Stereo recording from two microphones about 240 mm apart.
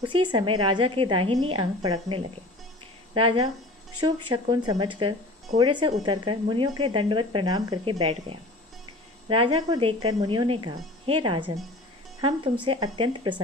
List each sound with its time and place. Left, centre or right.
0.0 s speech: centre
12.6 s speech: centre